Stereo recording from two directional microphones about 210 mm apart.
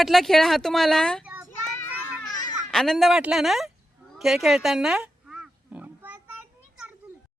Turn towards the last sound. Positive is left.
turn(degrees=-5)  # may be behind; listen again after turning